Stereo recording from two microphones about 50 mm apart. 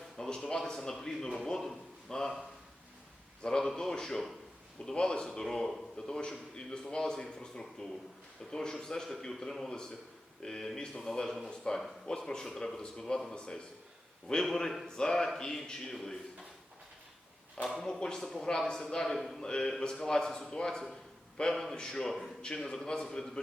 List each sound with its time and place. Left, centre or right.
0.2 s a man's voice: centre
3.4 s a man's voice: centre
14.4 s a man's voice: centre
17.6 s speech: centre
18.0 s a man's voice: centre
19.4 s a man's voice: centre